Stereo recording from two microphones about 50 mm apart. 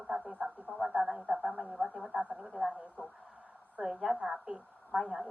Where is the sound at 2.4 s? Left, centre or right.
Centre.